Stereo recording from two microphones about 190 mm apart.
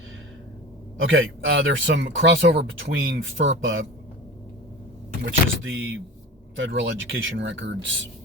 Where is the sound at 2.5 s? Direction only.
75° right (ahead or behind).